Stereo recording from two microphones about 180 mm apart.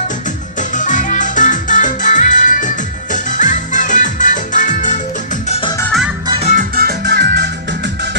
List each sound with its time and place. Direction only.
0.6 s music: 45° left (ahead or behind)
6.2 s music: 30° right (ahead or behind)
6.5 s music: 55° right (ahead or behind); by 8.2 s 75° right (ahead or behind)